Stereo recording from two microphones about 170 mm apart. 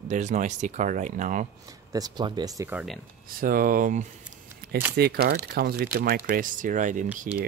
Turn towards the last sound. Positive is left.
turn(degrees=-60)  # may be behind; listen again after turning